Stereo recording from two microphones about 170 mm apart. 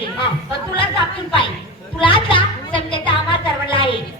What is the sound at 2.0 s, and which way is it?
Music, 30° left (ahead or behind).